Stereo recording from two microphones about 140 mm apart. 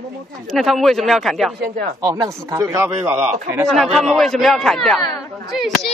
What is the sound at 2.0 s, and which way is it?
Speech, 30° right (ahead or behind).